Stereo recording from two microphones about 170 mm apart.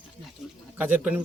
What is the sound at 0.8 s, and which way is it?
Speech, 10° right (ahead or behind).